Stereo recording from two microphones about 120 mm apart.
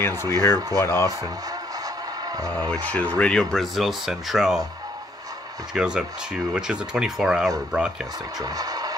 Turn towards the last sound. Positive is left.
turn(degrees=-5)  # may be behind; listen again after turning